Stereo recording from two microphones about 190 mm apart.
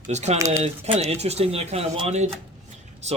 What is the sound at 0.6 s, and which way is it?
Speech, 35° right (ahead or behind).